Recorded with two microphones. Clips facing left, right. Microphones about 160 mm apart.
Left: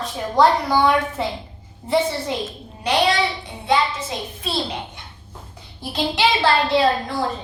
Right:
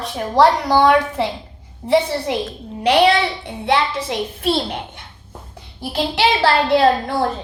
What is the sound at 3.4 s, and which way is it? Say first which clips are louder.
A woman's voice: right 2 dB; 65° right (ahead or behind).